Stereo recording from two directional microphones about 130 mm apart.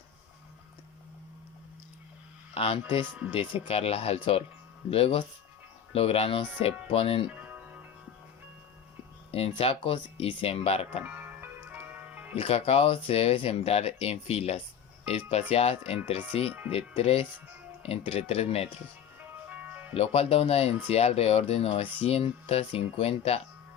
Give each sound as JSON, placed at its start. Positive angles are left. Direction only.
{"t": 2.6, "sound": "speech", "side_deg": 50}
{"t": 7.3, "sound": "music", "side_deg": -10}
{"t": 9.3, "sound": "speech", "side_deg": 50}
{"t": 11.0, "sound": "music", "side_deg": -15}
{"t": 12.4, "sound": "speech", "side_deg": 50}
{"t": 19.5, "sound": "music", "side_deg": -10}
{"t": 19.9, "sound": "speech", "side_deg": 50}